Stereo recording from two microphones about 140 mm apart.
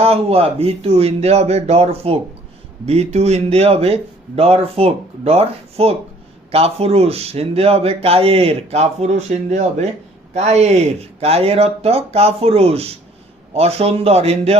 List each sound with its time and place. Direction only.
0.0 s speech: 45° right (ahead or behind)